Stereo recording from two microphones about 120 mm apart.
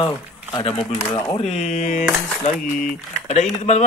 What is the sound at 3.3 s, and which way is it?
Speech, 65° left (ahead or behind).